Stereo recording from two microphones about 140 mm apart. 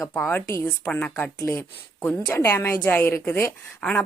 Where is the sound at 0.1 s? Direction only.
10° left (ahead or behind).